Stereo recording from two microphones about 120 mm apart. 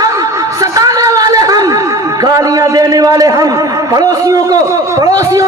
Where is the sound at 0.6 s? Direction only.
30° right (ahead or behind).